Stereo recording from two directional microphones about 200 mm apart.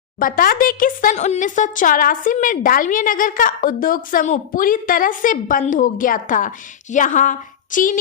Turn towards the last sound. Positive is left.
turn(degrees=40)  # may be behind; listen again after turning